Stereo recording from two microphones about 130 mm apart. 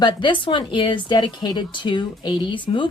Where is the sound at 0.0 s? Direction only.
35° left (ahead or behind).